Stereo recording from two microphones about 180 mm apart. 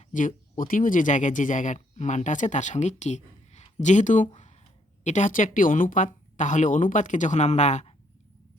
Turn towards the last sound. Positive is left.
turn(degrees=40)  # may be behind; listen again after turning